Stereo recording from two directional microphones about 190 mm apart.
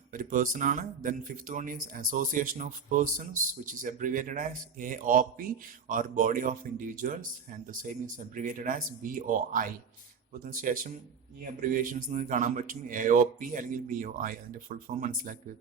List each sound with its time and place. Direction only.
0.1 s speech: 45° right (ahead or behind)